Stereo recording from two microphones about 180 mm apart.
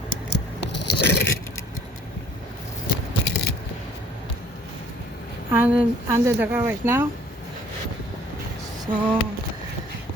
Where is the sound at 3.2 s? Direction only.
65° left (ahead or behind).